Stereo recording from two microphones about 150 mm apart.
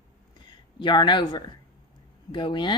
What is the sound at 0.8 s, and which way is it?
Speech, 30° left (ahead or behind).